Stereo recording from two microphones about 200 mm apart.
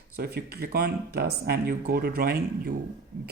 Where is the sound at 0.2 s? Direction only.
50° right (ahead or behind).